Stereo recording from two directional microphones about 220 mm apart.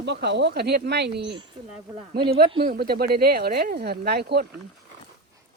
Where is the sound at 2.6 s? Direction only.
45° right (ahead or behind).